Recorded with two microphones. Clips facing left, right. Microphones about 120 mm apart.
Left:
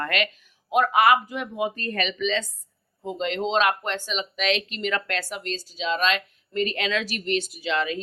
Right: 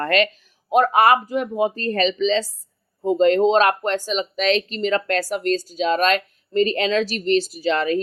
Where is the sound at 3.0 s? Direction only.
45° right (ahead or behind).